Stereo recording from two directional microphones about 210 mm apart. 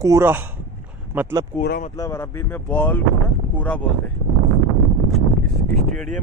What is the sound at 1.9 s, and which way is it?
Speech, 15° left (ahead or behind).